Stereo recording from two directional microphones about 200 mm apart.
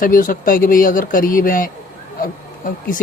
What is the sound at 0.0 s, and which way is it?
Speech, 45° left (ahead or behind).